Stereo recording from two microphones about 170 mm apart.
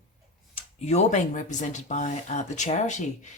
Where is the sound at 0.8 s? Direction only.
40° left (ahead or behind).